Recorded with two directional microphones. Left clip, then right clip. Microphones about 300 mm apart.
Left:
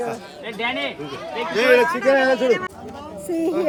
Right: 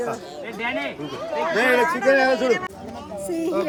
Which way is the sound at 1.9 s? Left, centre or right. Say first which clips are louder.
Left 1 dB; centre.